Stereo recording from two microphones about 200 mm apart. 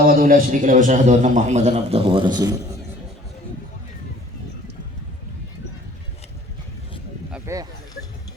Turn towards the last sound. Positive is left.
turn(degrees=-15)  # may be behind; listen again after turning